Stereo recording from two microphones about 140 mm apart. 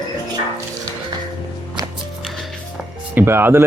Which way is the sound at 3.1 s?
15° right (ahead or behind).